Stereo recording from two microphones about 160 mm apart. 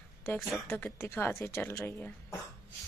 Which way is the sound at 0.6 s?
15° left (ahead or behind).